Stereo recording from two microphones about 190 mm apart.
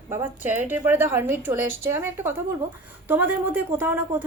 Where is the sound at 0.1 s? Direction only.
10° right (ahead or behind).